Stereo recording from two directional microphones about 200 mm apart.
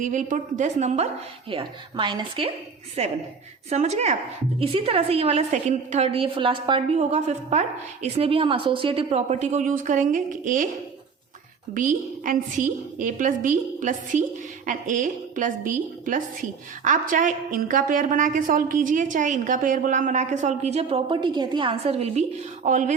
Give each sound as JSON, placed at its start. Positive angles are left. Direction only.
{"t": 0.0, "sound": "a woman's voice", "side_deg": -40}
{"t": 11.7, "sound": "a woman's voice", "side_deg": -40}